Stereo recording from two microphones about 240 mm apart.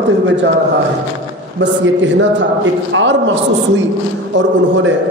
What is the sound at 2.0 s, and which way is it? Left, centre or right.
A man's voice, right.